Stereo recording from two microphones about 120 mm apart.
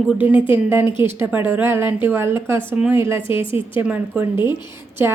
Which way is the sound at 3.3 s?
45° left (ahead or behind).